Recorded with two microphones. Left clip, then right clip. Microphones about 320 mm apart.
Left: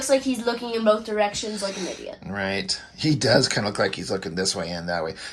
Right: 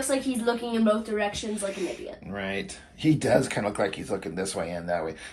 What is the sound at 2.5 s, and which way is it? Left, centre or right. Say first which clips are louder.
Speech: left 6 dB; left.